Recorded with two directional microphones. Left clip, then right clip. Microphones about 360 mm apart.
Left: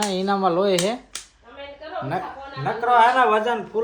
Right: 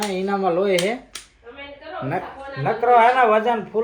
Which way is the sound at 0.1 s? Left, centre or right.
Centre.